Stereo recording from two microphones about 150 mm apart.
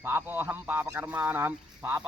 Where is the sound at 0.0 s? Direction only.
15° right (ahead or behind).